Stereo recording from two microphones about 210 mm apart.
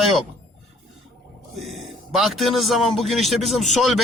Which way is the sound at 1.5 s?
Centre (ahead or behind).